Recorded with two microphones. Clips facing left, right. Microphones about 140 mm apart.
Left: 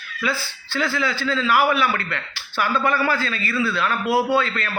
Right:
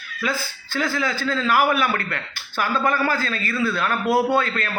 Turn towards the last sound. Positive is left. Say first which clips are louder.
# even
turn(degrees=-45)  # may be behind; listen again after turning